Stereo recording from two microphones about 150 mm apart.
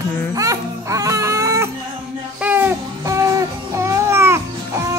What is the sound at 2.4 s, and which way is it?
Music, 15° right (ahead or behind).